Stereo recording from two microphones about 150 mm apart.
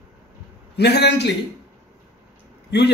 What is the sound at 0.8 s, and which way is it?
Speech, 90° left.